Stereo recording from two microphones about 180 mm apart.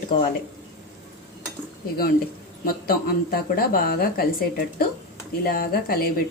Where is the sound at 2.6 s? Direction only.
55° left (ahead or behind).